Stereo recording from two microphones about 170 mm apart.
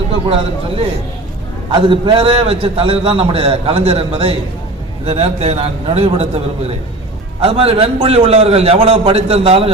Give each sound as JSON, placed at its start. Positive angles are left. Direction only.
{"t": 0.3, "sound": "a man's voice", "side_deg": -35}